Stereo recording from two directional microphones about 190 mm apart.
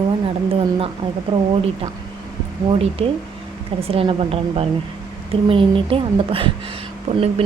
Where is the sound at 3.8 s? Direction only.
30° right (ahead or behind).